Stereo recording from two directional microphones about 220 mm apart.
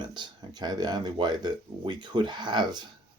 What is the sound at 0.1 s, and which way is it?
Speech, 20° right (ahead or behind).